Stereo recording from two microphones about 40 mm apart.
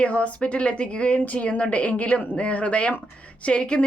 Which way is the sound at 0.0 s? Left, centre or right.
Left.